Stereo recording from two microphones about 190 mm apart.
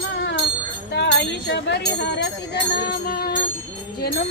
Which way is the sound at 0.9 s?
60° left (ahead or behind).